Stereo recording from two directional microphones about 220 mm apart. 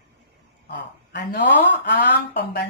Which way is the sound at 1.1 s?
50° left (ahead or behind).